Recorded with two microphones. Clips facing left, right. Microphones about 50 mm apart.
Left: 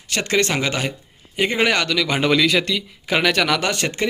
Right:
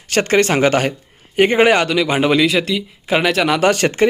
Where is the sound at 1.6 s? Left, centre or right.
Right.